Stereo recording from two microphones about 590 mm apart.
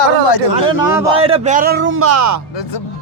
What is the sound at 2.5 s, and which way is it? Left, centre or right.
Speech, left.